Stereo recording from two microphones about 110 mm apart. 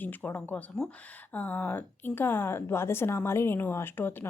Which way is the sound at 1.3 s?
15° left (ahead or behind).